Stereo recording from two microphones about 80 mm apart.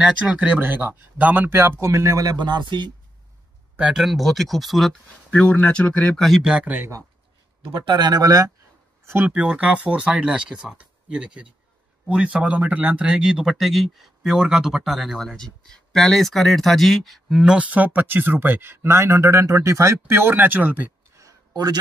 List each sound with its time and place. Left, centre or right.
0.6 s speech: right
1.9 s speech: right
2.3 s speech: right
3.9 s speech: centre
5.3 s speech: centre
6.2 s speech: centre
6.5 s speech: right
7.8 s speech: right
9.2 s speech: centre
21.2 s a sound: right